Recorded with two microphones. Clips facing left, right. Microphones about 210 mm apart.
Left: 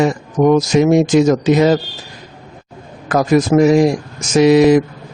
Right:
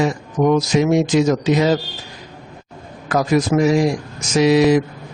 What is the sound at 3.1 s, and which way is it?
A man's voice, 45° left (ahead or behind).